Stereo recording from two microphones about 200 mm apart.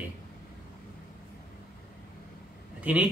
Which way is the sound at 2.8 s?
5° right (ahead or behind).